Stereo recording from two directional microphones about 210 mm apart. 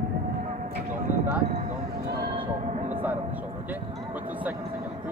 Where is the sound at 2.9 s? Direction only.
10° right (ahead or behind).